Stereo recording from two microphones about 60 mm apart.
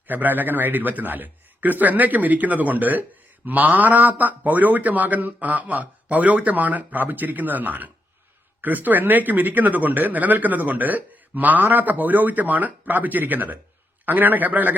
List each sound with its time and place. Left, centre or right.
0.1 s speech: right